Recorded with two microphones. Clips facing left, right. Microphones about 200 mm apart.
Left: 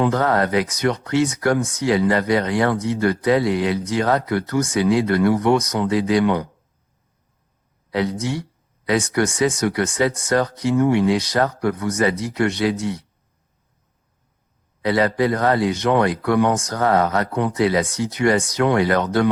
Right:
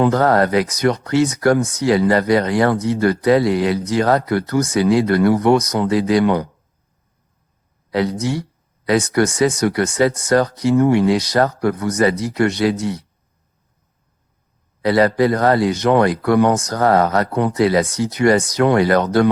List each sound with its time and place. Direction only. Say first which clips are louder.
0.0 s speech: right 4 dB; 40° right (ahead or behind)
7.9 s speech: right 3 dB; 40° right (ahead or behind)
14.8 s speech: right 4 dB; 40° right (ahead or behind)